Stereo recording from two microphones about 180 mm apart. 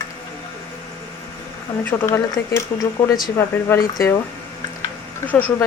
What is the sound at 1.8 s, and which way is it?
Speech, 15° left (ahead or behind).